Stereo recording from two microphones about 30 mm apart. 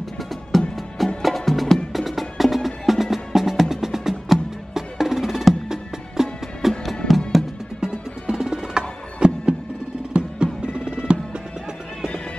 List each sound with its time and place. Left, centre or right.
0.5 s music: centre
8.3 s music: right